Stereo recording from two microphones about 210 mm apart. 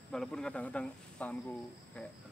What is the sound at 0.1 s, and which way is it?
Speech, 5° left (ahead or behind).